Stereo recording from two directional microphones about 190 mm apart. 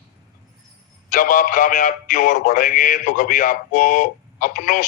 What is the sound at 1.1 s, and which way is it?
A man's voice, 45° left (ahead or behind).